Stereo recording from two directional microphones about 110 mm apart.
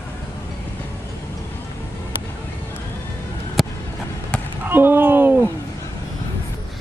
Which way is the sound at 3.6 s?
Centre (ahead or behind).